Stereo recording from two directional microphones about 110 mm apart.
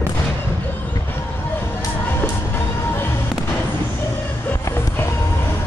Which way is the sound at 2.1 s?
20° left (ahead or behind).